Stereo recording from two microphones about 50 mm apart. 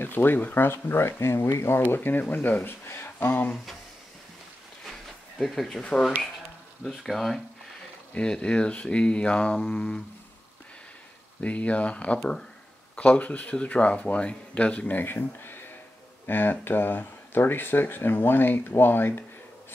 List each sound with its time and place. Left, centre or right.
0.0 s speech: left
0.7 s speech: left
2.0 s speech: left
2.8 s speech: left
5.4 s speech: centre
7.0 s speech: centre
8.1 s speech: left
9.7 s didgeridoo: centre
11.4 s speech: left
15.0 s speech: left